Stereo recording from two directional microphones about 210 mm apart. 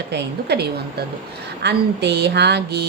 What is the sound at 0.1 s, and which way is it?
A woman's voice, 55° right (ahead or behind).